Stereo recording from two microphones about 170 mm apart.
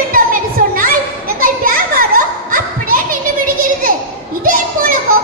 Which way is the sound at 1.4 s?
55° right (ahead or behind).